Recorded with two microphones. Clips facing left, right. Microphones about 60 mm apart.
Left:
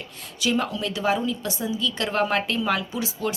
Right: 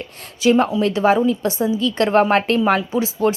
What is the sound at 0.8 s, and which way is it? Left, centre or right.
A woman's voice, right.